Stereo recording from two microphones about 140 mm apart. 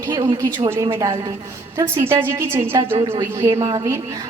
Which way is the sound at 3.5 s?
45° right (ahead or behind).